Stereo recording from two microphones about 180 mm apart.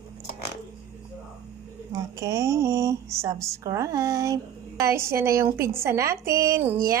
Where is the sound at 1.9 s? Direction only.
15° right (ahead or behind).